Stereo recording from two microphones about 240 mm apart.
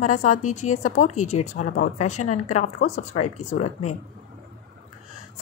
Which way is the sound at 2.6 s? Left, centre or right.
Left.